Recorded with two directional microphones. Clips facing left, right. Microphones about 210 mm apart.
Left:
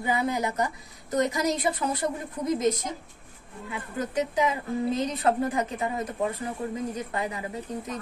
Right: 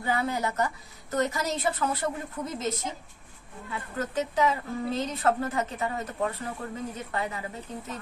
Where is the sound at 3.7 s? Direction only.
10° left (ahead or behind).